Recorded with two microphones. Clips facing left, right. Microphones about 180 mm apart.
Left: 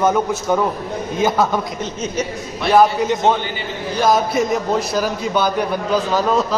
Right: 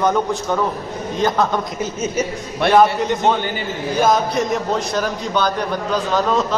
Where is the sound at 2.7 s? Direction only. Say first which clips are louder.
Left 1 dB; 5° left (ahead or behind).